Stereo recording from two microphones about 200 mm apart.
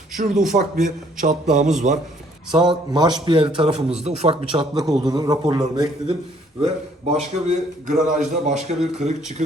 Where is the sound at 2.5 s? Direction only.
20° right (ahead or behind).